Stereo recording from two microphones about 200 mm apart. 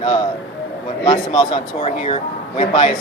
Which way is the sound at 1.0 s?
20° left (ahead or behind).